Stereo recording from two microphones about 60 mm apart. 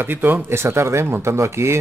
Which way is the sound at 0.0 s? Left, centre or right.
Right.